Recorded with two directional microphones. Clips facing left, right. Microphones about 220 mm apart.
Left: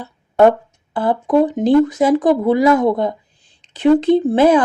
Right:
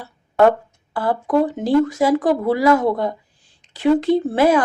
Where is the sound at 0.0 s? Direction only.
20° left (ahead or behind).